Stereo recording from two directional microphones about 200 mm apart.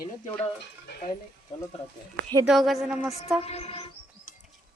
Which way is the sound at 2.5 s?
Centre (ahead or behind).